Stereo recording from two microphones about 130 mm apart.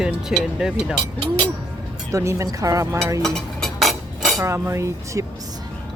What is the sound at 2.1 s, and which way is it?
Speech, 25° right (ahead or behind).